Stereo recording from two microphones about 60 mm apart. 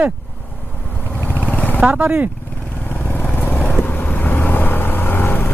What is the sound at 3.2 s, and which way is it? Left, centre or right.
Vehicle, left.